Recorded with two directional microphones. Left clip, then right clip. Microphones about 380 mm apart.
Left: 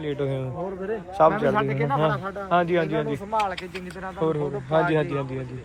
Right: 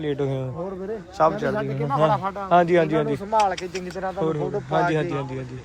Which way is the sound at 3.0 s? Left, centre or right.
Right.